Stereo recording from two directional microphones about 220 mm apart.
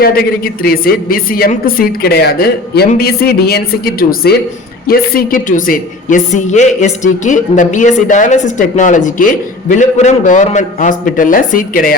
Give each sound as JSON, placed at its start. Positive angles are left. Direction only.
{"t": 0.0, "sound": "a woman's voice", "side_deg": 45}